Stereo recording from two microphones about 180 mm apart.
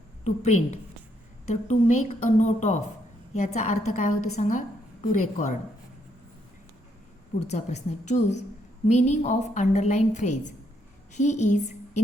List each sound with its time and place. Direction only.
0.3 s a woman's voice: 40° left (ahead or behind)
7.4 s a woman's voice: 40° left (ahead or behind)